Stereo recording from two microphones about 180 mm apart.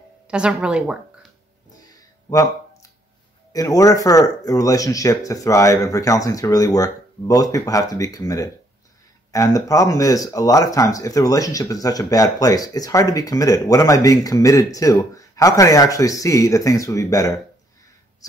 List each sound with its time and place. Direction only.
0.3 s a woman's voice: 5° right (ahead or behind)
1.9 s a sound: 20° left (ahead or behind)
3.5 s speech: 20° left (ahead or behind)